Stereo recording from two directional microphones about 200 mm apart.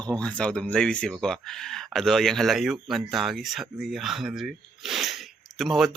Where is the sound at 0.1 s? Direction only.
5° left (ahead or behind).